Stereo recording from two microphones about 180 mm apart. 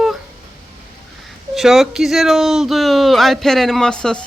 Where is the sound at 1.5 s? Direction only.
Centre (ahead or behind).